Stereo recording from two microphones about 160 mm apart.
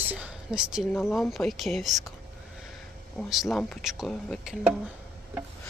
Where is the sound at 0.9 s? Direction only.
15° left (ahead or behind).